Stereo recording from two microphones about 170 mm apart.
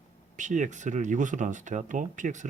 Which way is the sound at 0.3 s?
45° right (ahead or behind).